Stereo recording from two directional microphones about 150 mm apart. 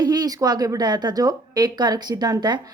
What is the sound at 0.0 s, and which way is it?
A woman's voice, 30° right (ahead or behind).